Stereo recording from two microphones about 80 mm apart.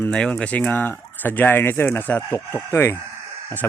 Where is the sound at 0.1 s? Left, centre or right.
Centre.